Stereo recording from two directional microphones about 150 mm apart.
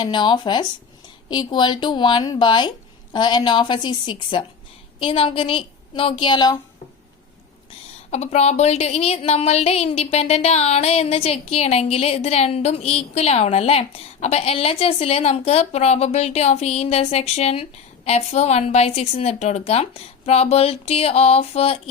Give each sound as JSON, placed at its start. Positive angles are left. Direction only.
{"t": 0.0, "sound": "speech", "side_deg": 30}
{"t": 8.1, "sound": "speech", "side_deg": 45}